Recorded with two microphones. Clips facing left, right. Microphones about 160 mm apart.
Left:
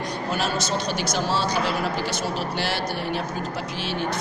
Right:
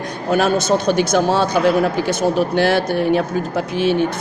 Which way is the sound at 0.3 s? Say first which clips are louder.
Right 12 dB; 55° right (ahead or behind).